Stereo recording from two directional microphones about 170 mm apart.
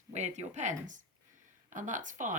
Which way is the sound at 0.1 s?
45° right (ahead or behind).